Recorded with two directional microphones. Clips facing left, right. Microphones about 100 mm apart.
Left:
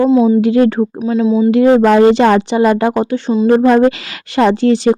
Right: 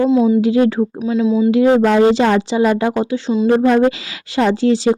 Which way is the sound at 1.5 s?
60° left (ahead or behind).